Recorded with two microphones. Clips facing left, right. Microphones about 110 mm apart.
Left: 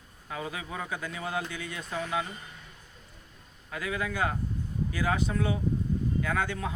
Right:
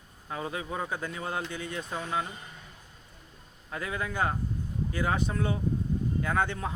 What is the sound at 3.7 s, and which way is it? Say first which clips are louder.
Speech: left 1 dB; 30° right (ahead or behind).